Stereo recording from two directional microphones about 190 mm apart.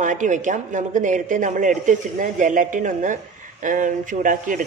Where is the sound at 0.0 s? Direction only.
40° right (ahead or behind).